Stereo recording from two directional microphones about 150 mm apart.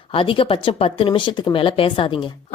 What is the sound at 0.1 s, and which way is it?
A woman's voice, 35° left (ahead or behind).